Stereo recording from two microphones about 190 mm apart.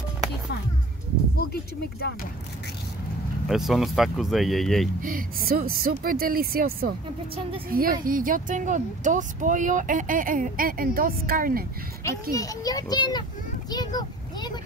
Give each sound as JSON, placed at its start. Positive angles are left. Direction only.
{"t": 1.5, "sound": "speech", "side_deg": 55}
{"t": 3.4, "sound": "speech", "side_deg": 0}
{"t": 5.0, "sound": "speech", "side_deg": -50}
{"t": 12.0, "sound": "a child's voice", "side_deg": 15}